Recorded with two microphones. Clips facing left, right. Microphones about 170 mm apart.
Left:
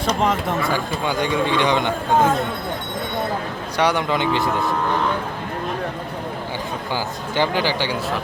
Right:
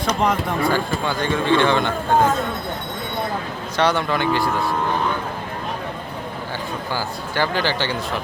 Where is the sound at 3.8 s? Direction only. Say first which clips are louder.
Even; 15° left (ahead or behind).